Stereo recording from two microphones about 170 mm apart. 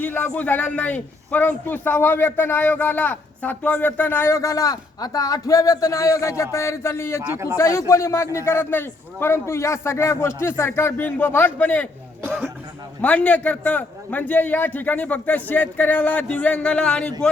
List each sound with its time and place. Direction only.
0.0 s a man's voice: 10° left (ahead or behind)
7.2 s speech: 10° right (ahead or behind)
7.5 s a man's voice: 15° left (ahead or behind)
13.0 s a man's voice: 10° left (ahead or behind)